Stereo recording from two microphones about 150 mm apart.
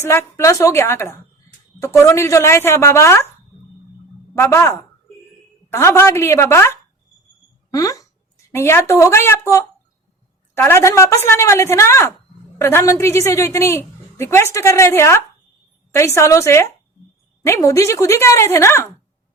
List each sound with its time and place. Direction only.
0.0 s a woman's voice: 15° left (ahead or behind)
4.4 s a woman's voice: 20° left (ahead or behind)